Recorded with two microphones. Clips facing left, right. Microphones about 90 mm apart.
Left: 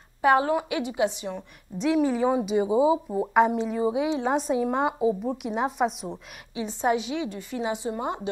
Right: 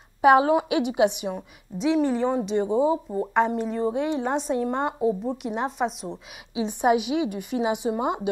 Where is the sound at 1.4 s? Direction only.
Centre (ahead or behind).